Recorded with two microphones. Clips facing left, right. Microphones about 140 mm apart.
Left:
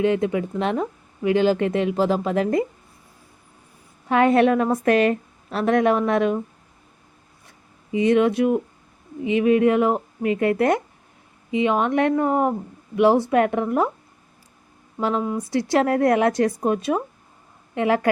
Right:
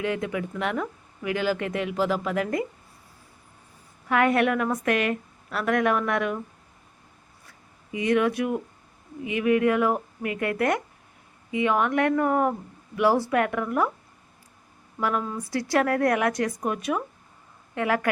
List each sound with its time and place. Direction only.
0.0 s speech: 25° left (ahead or behind)
4.1 s speech: 25° left (ahead or behind)
7.9 s speech: 25° left (ahead or behind)
14.9 s speech: 25° left (ahead or behind)